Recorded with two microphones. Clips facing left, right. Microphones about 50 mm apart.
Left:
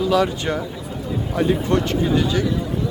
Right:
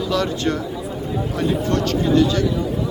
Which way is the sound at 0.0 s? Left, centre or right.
Centre.